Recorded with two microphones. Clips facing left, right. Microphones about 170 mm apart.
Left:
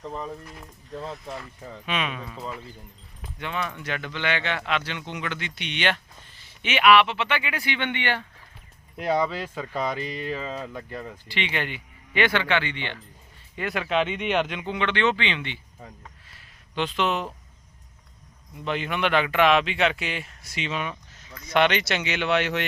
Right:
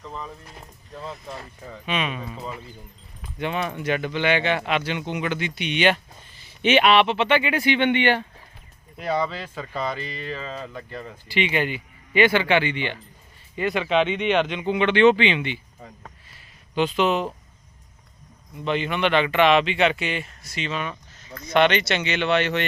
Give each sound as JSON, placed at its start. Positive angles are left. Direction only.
{"t": 1.8, "sound": "a man's voice", "side_deg": 0}
{"t": 3.3, "sound": "speech", "side_deg": -20}
{"t": 6.6, "sound": "speech", "side_deg": -25}
{"t": 9.0, "sound": "speech", "side_deg": 15}
{"t": 11.3, "sound": "speech", "side_deg": -10}
{"t": 13.6, "sound": "a man's voice", "side_deg": 0}
{"t": 14.7, "sound": "speech", "side_deg": -10}
{"t": 16.7, "sound": "a man's voice", "side_deg": -5}
{"t": 18.6, "sound": "a man's voice", "side_deg": 5}